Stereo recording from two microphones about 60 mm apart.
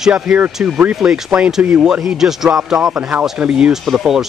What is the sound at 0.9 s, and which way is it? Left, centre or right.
Speech, centre.